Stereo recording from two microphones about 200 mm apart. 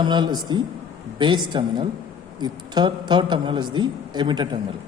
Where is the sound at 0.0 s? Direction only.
20° right (ahead or behind).